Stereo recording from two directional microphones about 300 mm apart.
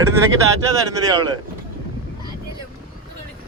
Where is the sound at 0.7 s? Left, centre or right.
Centre.